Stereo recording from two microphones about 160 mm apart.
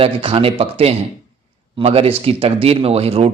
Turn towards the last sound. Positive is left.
turn(degrees=-40)  # may be behind; listen again after turning